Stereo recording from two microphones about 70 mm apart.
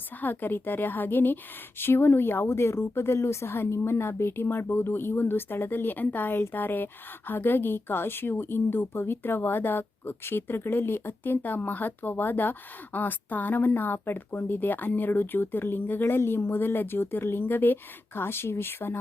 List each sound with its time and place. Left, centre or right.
0.2 s a woman's voice: left